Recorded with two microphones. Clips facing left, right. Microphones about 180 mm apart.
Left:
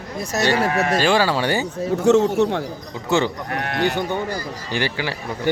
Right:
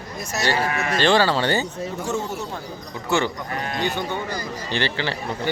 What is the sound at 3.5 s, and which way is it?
Speech, 65° left (ahead or behind).